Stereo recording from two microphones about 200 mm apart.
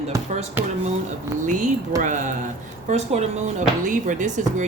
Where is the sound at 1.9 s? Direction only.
40° right (ahead or behind).